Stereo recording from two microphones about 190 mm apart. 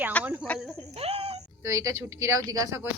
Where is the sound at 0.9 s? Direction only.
30° right (ahead or behind).